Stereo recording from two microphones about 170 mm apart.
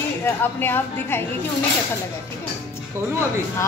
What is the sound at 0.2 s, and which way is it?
A woman's voice, 15° left (ahead or behind).